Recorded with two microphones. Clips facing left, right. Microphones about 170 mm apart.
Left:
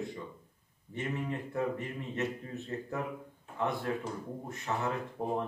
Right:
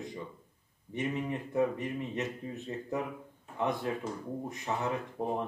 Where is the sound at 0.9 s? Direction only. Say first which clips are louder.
Right 2 dB; 15° right (ahead or behind).